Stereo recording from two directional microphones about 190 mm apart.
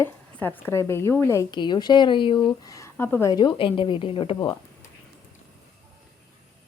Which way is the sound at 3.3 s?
25° left (ahead or behind).